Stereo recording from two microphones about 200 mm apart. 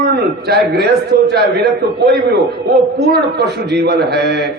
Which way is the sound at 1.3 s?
55° right (ahead or behind).